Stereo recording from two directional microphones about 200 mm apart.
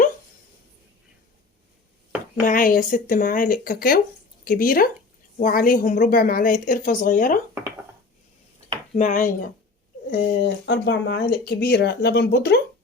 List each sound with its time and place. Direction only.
2.5 s a woman's voice: 45° left (ahead or behind)
9.0 s speech: 40° left (ahead or behind)
10.1 s speech: 50° left (ahead or behind)